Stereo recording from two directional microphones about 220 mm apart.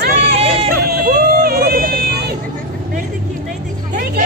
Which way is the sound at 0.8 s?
45° right (ahead or behind).